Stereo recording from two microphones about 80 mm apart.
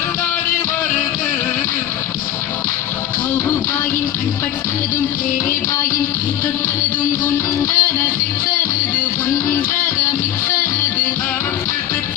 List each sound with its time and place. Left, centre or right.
7.3 s music: left